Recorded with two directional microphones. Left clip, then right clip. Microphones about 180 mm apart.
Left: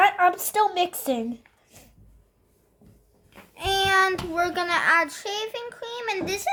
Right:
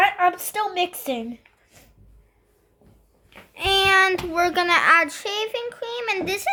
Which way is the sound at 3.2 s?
40° right (ahead or behind).